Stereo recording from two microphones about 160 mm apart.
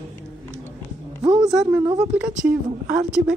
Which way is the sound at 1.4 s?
5° right (ahead or behind).